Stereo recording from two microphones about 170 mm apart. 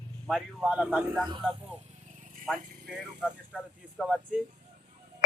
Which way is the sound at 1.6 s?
40° right (ahead or behind).